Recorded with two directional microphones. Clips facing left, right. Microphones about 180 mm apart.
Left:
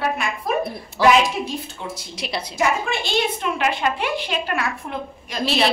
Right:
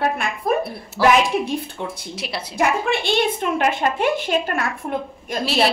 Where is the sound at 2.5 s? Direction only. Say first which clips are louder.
Right 3 dB; 60° right (ahead or behind).